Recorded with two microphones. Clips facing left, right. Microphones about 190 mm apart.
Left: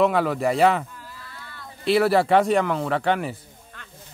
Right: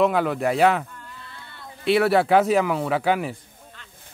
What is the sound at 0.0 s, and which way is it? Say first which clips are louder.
Speech: even; centre (ahead or behind).